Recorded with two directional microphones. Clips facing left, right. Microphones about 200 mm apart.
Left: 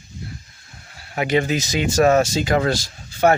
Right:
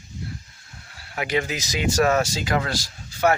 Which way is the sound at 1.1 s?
25° left (ahead or behind).